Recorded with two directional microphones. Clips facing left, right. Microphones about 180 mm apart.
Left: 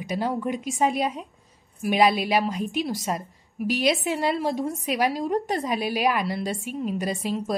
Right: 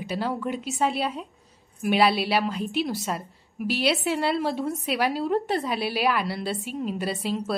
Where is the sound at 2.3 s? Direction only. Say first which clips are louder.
Left 1 dB; 15° left (ahead or behind).